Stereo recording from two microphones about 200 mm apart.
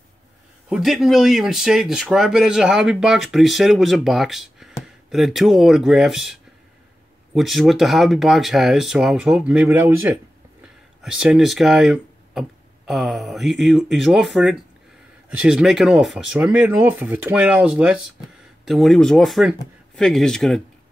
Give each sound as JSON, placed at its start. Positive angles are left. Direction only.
{"t": 0.7, "sound": "speech", "side_deg": 0}